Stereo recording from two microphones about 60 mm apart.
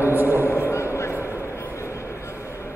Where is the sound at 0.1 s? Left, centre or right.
Right.